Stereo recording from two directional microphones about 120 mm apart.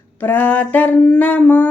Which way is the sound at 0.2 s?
15° left (ahead or behind).